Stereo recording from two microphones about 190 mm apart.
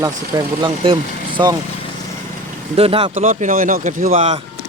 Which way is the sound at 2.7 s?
30° right (ahead or behind).